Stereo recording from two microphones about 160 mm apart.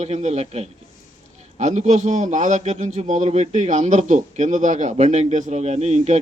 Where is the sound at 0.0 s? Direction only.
45° right (ahead or behind).